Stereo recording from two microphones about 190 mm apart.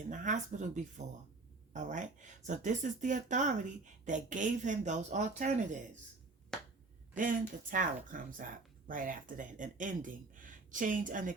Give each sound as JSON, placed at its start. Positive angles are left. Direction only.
{"t": 0.1, "sound": "speech", "side_deg": -40}
{"t": 7.2, "sound": "speech", "side_deg": -45}